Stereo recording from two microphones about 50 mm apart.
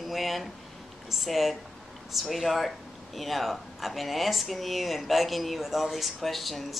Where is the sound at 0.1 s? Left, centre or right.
Centre.